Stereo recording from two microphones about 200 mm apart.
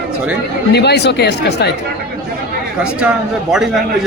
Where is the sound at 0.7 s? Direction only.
55° left (ahead or behind).